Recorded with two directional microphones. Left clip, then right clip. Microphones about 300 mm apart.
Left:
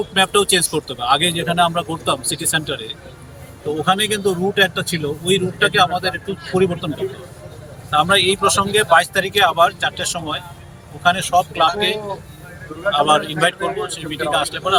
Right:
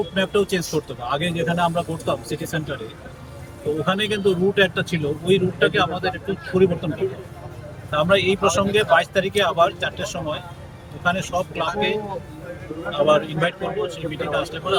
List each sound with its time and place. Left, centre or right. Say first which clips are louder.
0.1 s speech: left 9 dB; centre
3.8 s speech: left 4 dB; centre
13.1 s speech: left 3 dB; centre